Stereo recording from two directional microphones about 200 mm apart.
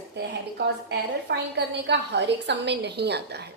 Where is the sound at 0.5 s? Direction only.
55° right (ahead or behind).